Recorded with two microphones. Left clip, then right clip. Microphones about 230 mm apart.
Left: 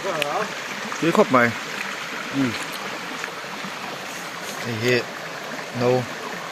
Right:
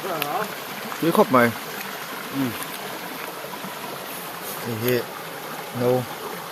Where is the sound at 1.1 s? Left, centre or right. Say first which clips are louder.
Even; centre.